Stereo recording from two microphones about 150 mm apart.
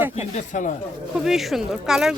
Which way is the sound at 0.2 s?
55° left (ahead or behind).